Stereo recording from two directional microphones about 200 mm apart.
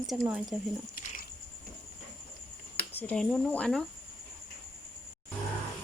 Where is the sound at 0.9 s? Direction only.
45° left (ahead or behind).